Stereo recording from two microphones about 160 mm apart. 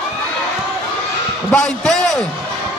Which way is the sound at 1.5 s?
5° left (ahead or behind).